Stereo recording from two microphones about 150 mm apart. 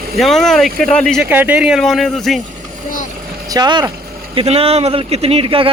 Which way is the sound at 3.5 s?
30° right (ahead or behind).